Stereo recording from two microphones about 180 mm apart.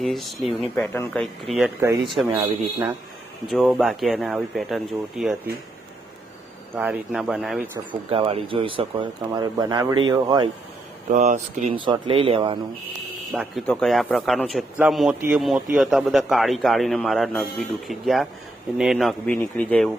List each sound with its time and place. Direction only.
0.0 s a man's voice: centre (ahead or behind)
2.3 s speech: 15° right (ahead or behind)
3.5 s a man's voice: centre (ahead or behind)
6.7 s a man's voice: 10° right (ahead or behind)
8.1 s speech: 30° right (ahead or behind)
11.1 s speech: 40° right (ahead or behind)
11.9 s speech: 30° right (ahead or behind)
13.3 s a man's voice: centre (ahead or behind)